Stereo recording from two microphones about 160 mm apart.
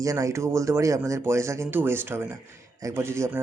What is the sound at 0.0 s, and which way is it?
Speech, 20° right (ahead or behind).